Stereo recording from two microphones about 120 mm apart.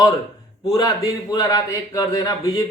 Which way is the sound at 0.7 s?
30° left (ahead or behind).